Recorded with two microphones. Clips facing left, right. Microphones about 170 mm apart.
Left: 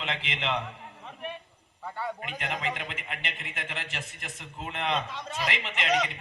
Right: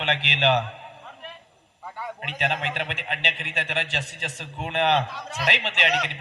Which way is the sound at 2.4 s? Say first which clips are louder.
Right 7 dB; 75° right (ahead or behind).